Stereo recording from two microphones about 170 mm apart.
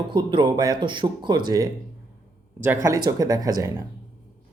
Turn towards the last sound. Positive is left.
turn(degrees=-20)  # may be behind; listen again after turning